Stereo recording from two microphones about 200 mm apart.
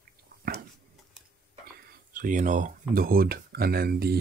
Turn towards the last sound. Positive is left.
turn(degrees=-50)  # may be behind; listen again after turning